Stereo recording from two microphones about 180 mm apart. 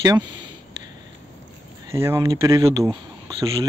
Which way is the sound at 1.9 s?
15° right (ahead or behind).